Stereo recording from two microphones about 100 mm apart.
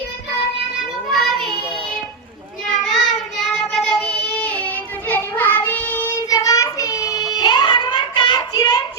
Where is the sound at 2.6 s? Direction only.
5° left (ahead or behind).